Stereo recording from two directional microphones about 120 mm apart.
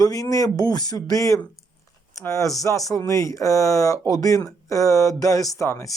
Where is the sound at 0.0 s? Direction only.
30° left (ahead or behind).